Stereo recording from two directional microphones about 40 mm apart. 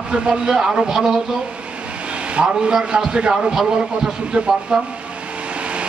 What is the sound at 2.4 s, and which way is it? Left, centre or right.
A man's voice, right.